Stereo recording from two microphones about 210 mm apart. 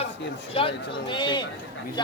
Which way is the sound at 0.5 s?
25° left (ahead or behind).